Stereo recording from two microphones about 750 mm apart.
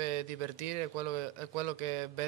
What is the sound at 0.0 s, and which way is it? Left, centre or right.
A man's voice, right.